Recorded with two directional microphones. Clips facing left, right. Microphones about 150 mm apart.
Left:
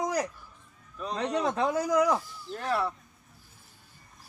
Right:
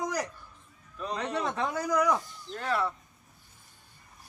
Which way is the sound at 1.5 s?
20° left (ahead or behind).